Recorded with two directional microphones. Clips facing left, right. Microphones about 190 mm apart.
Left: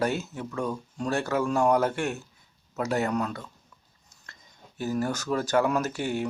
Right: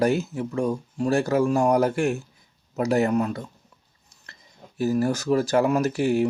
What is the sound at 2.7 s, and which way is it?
Speech, 15° right (ahead or behind).